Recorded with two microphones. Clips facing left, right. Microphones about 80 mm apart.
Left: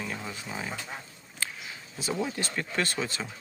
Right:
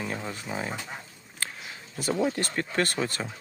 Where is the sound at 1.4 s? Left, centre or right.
Right.